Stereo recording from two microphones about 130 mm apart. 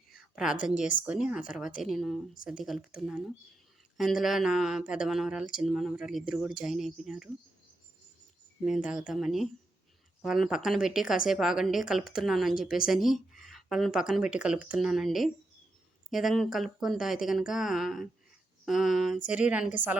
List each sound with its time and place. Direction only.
0.5 s a woman's voice: 90° left
1.0 s a woman's voice: 5° right (ahead or behind)
8.6 s a woman's voice: 5° right (ahead or behind)